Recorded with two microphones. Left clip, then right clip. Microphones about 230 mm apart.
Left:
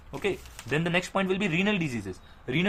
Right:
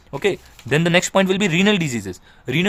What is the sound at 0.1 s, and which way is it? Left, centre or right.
A man's voice, right.